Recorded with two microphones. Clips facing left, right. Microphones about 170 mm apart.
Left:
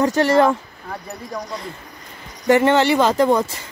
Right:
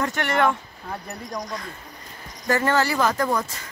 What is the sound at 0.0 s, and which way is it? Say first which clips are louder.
Speech: left 7 dB; 35° left (ahead or behind).